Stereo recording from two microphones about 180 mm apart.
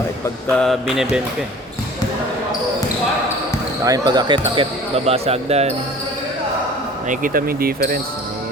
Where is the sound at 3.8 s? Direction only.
20° right (ahead or behind).